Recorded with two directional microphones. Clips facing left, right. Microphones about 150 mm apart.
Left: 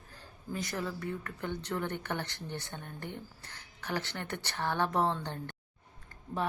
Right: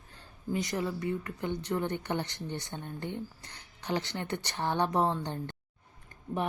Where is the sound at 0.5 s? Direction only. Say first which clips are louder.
Right 4 dB; 20° right (ahead or behind).